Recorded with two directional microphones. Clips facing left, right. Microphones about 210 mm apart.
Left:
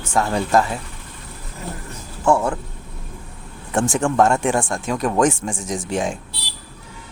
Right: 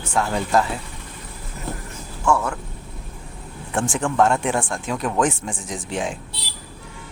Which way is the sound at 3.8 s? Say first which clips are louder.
Left 2 dB; 45° left (ahead or behind).